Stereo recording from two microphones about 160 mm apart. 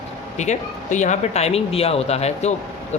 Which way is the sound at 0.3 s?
50° left (ahead or behind).